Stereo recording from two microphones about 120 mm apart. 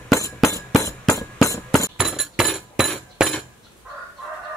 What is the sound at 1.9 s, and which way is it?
Chink, 5° right (ahead or behind).